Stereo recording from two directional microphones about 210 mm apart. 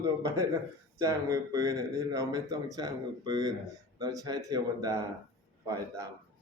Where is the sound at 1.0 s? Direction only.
15° right (ahead or behind).